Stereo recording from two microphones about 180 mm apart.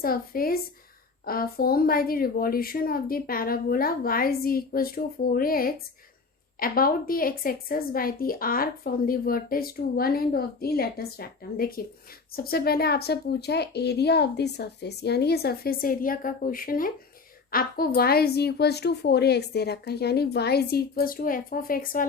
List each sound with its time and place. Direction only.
0.0 s a woman's voice: 55° left (ahead or behind)